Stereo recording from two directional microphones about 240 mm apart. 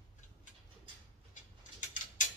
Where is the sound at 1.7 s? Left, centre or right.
Left.